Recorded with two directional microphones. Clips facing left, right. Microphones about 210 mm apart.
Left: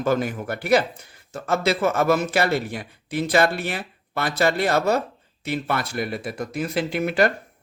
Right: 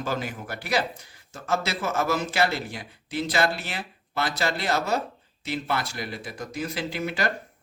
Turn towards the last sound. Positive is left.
turn(degrees=60)  # may be behind; listen again after turning